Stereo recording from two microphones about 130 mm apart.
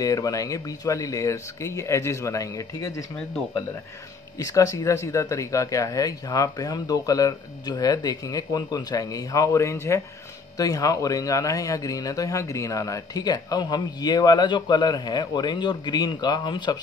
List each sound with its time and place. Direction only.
0.0 s speech: 30° left (ahead or behind)
4.4 s speech: 25° left (ahead or behind)